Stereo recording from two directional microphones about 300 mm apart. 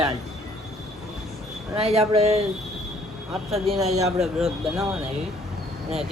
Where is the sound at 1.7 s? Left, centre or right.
Centre.